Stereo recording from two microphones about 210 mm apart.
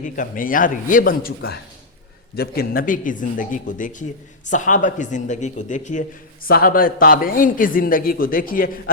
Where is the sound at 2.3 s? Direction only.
45° left (ahead or behind).